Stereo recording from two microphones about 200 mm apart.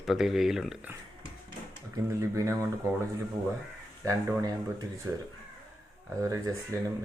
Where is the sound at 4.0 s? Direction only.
15° right (ahead or behind).